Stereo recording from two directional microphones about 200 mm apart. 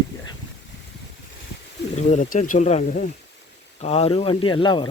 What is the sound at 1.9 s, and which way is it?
Speech, 35° left (ahead or behind).